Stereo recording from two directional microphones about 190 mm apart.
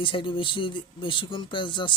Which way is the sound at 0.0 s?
25° left (ahead or behind).